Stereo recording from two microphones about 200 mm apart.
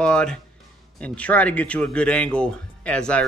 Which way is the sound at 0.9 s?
5° left (ahead or behind).